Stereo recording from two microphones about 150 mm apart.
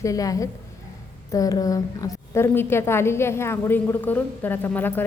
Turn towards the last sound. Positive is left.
turn(degrees=15)  # may be behind; listen again after turning